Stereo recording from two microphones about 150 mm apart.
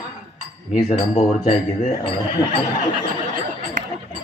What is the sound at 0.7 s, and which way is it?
Speech, 45° left (ahead or behind).